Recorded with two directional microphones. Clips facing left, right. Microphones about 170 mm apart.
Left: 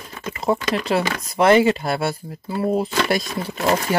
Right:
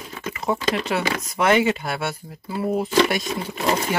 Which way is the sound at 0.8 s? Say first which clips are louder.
Left 3 dB; 35° left (ahead or behind).